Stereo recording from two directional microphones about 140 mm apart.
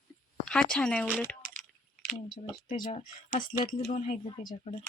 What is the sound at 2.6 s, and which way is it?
Speech, 75° left (ahead or behind).